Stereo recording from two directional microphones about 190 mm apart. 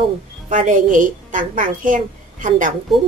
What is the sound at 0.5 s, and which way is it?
A woman's voice, 45° right (ahead or behind).